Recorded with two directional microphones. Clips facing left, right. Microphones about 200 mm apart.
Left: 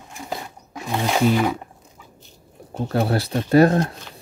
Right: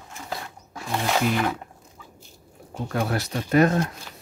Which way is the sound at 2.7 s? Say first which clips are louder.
Left 5 dB; 30° left (ahead or behind).